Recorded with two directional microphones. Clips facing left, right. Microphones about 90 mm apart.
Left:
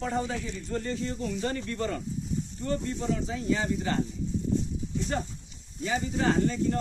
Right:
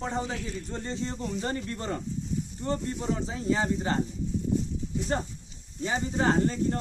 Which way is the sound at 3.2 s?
30° right (ahead or behind).